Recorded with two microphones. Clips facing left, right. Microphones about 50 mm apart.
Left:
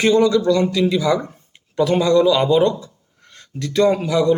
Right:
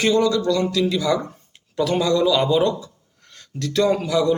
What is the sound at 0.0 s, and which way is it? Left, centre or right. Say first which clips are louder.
A man's voice: left 3 dB; centre.